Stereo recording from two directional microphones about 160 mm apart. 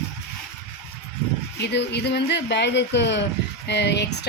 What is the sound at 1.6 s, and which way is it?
Speech, 90° left.